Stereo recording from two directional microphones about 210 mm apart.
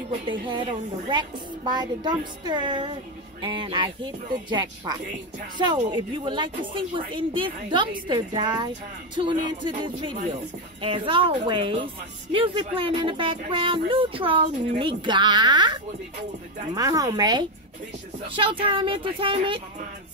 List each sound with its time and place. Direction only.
0.2 s a woman's voice: 25° right (ahead or behind)